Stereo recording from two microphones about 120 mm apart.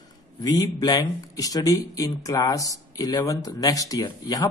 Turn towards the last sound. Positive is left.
turn(degrees=30)  # may be behind; listen again after turning